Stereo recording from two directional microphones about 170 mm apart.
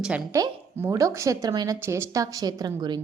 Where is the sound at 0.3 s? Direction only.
20° right (ahead or behind).